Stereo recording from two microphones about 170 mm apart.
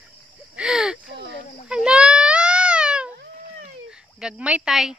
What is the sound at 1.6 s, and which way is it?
Baby cry, 5° right (ahead or behind).